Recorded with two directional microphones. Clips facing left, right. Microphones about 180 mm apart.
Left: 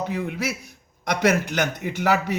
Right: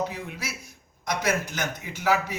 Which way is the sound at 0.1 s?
55° left (ahead or behind).